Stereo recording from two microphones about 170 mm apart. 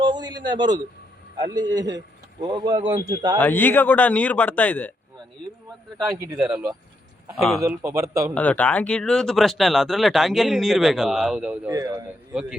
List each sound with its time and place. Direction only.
0.0 s speech: 25° right (ahead or behind)
3.4 s a man's voice: 10° left (ahead or behind)
6.2 s a man's voice: 5° right (ahead or behind)
8.4 s speech: 10° left (ahead or behind)
11.7 s speech: 20° right (ahead or behind)
12.3 s speech: 5° right (ahead or behind)